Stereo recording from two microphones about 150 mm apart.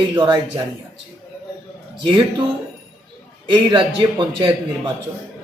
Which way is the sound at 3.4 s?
30° right (ahead or behind).